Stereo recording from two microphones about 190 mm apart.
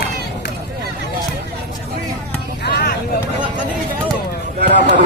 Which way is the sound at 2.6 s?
55° left (ahead or behind).